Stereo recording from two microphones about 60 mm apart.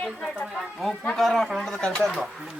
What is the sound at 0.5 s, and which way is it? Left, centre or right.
Speech, centre.